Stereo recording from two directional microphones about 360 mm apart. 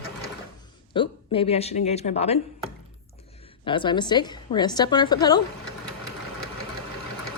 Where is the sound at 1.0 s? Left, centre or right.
Centre.